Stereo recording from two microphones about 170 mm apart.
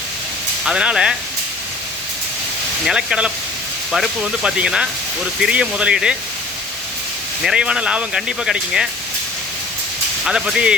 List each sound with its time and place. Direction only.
0.6 s speech: 5° right (ahead or behind)
2.8 s speech: 5° right (ahead or behind)
7.4 s speech: 5° right (ahead or behind)
10.2 s speech: 5° right (ahead or behind)